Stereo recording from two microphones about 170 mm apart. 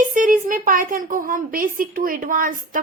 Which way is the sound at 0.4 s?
55° right (ahead or behind).